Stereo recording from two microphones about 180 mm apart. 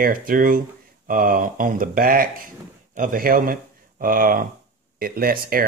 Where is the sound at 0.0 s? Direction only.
50° right (ahead or behind).